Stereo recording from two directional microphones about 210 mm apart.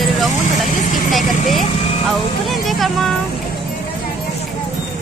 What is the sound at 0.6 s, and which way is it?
Speech, 40° left (ahead or behind).